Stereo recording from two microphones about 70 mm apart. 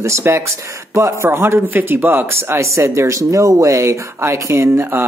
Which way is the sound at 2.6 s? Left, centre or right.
Right.